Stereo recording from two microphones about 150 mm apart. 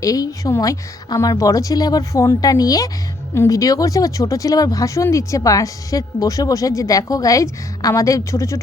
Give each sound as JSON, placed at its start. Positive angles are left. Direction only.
{"t": 0.0, "sound": "speech", "side_deg": 25}